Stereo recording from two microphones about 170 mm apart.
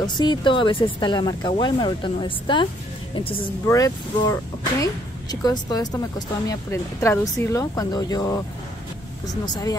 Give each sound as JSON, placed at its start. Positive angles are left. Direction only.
{"t": 0.0, "sound": "speech", "side_deg": 25}
{"t": 3.6, "sound": "speech", "side_deg": 20}